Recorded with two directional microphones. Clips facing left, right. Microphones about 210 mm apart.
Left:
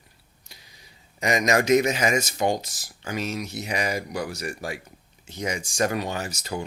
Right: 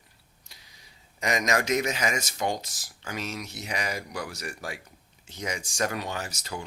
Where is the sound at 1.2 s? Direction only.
10° left (ahead or behind).